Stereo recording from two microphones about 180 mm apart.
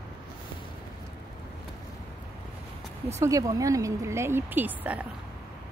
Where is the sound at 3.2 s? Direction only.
20° right (ahead or behind).